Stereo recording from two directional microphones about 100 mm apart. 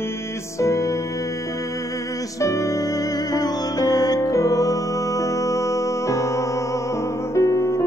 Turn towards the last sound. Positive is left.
turn(degrees=30)  # may be behind; listen again after turning